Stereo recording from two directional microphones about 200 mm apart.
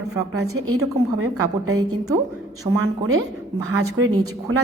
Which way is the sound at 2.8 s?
90° right.